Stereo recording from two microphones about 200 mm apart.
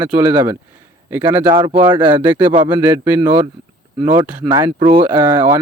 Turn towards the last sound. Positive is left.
turn(degrees=-20)  # may be behind; listen again after turning